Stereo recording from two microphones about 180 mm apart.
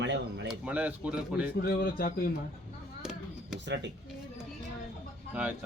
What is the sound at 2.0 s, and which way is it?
Speech, 55° left (ahead or behind).